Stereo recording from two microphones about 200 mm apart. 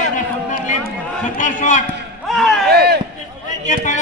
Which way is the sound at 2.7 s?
50° right (ahead or behind).